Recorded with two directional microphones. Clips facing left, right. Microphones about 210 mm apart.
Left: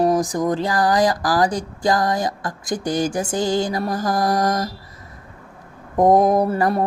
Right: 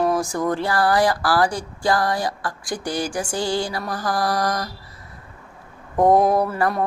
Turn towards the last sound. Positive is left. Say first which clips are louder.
# left 3 dB
turn(degrees=25)  # may be behind; listen again after turning